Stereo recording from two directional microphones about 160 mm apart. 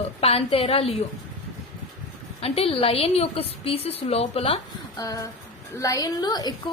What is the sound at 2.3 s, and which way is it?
A woman's voice, 40° left (ahead or behind).